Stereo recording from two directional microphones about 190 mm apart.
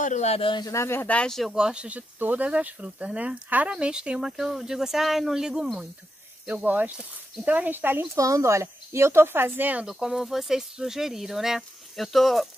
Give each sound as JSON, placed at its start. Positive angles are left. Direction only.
{"t": 0.0, "sound": "speech", "side_deg": 35}